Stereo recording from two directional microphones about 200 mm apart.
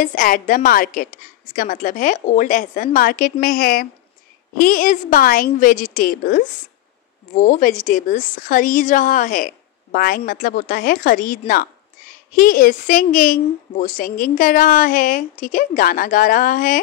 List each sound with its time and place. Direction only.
0.0 s a woman's voice: 45° left (ahead or behind)